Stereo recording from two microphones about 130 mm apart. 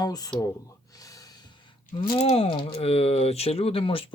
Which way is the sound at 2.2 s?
55° left (ahead or behind).